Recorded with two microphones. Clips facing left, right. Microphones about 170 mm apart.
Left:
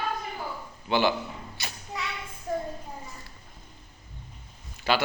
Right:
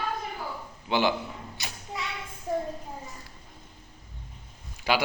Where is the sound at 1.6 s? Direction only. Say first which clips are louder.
Left 2 dB; 20° right (ahead or behind).